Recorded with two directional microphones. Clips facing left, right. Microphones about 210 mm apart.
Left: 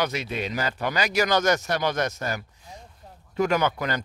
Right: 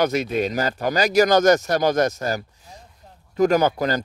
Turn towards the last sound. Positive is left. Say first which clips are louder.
# right 5 dB
turn(degrees=-35)  # may be behind; listen again after turning